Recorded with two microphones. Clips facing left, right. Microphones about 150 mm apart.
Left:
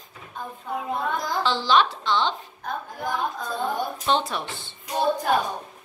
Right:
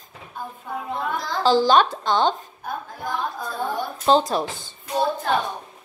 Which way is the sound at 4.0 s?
35° right (ahead or behind).